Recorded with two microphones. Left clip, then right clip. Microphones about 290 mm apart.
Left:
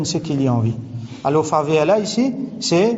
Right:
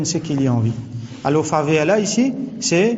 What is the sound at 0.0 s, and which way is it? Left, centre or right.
A man's voice, centre.